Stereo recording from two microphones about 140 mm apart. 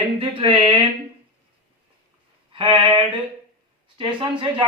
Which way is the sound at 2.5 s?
35° right (ahead or behind).